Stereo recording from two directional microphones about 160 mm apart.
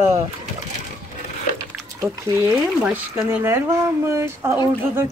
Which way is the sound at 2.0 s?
20° right (ahead or behind).